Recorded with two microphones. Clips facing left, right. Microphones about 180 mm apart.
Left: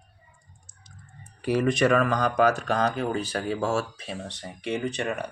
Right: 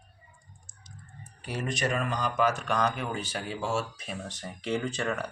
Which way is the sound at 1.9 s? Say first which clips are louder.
Left 4 dB; 90° left.